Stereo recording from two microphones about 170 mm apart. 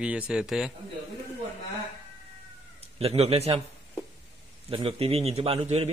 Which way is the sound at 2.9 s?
35° right (ahead or behind).